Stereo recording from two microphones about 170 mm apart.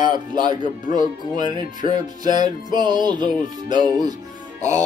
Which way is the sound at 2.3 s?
25° right (ahead or behind).